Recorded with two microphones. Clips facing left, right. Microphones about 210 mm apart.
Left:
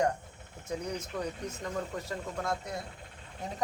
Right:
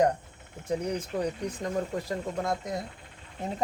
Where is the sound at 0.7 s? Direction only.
35° right (ahead or behind).